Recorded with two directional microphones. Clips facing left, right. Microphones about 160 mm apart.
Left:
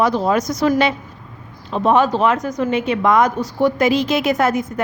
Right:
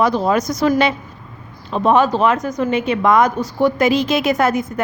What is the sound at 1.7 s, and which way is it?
Speech, 50° right (ahead or behind).